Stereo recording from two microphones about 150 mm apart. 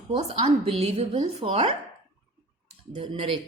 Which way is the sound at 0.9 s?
45° right (ahead or behind).